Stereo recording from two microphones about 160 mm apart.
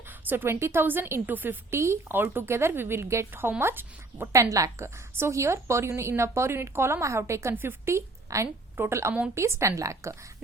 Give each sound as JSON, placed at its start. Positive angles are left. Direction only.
{"t": 0.3, "sound": "a woman's voice", "side_deg": -10}